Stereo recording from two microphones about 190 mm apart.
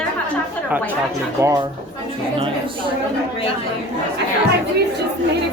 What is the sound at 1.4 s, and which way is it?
Speech, 15° right (ahead or behind).